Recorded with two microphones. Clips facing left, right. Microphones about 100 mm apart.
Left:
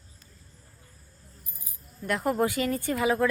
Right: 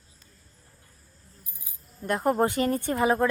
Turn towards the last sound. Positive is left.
turn(degrees=-25)  # may be behind; listen again after turning